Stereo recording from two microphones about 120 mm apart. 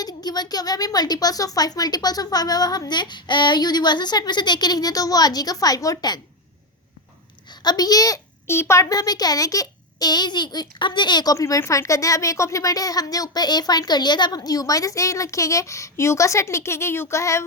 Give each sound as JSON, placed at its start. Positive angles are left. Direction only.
{"t": 0.0, "sound": "a woman's voice", "side_deg": 35}
{"t": 7.5, "sound": "a child's voice", "side_deg": 35}